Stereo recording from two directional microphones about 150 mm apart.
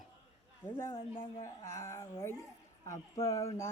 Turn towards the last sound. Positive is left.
turn(degrees=20)  # may be behind; listen again after turning